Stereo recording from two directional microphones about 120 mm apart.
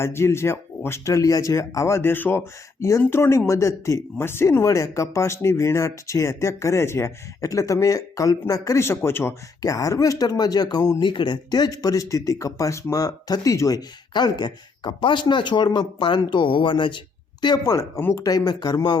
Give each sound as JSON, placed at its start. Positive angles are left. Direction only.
{"t": 0.0, "sound": "speech", "side_deg": 20}